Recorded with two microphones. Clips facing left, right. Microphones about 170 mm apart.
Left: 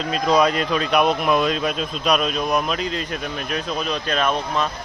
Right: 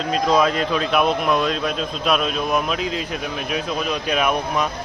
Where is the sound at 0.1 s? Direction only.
Centre (ahead or behind).